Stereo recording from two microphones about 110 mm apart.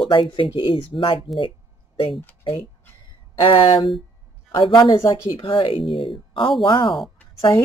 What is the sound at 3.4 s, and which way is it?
Speech, 50° left (ahead or behind).